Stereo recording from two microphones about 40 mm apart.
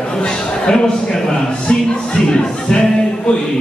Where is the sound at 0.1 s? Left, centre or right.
Centre.